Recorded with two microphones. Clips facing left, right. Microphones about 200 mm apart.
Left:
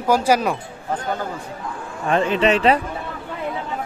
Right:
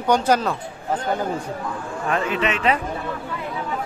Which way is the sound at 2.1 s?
30° left (ahead or behind).